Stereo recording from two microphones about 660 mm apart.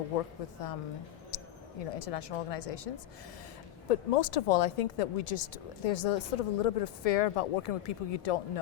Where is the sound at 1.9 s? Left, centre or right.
Left.